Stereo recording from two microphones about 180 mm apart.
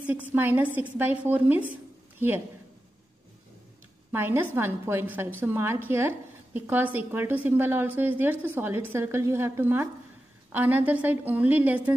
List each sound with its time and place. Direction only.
0.0 s a woman's voice: 10° right (ahead or behind)
4.1 s a woman's voice: 10° right (ahead or behind)